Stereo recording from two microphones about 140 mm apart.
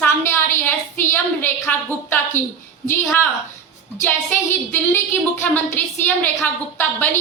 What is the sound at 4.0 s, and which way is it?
A woman's voice, 15° left (ahead or behind).